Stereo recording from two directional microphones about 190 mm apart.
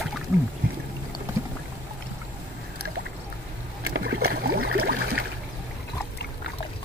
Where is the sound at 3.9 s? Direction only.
60° right (ahead or behind).